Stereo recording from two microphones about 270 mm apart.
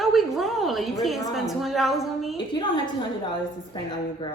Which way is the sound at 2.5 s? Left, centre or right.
Centre.